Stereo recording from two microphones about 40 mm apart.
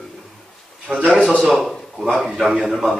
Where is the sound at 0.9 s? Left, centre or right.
Right.